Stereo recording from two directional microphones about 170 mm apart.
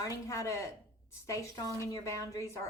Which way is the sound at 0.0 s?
20° left (ahead or behind).